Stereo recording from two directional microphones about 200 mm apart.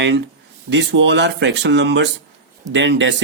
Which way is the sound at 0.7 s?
60° right (ahead or behind).